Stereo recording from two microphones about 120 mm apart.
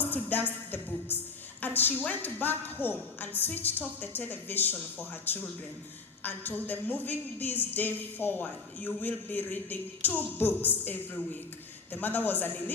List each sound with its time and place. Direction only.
0.1 s music: 15° left (ahead or behind)
1.6 s a sound: 15° left (ahead or behind)
2.0 s speech: 15° left (ahead or behind)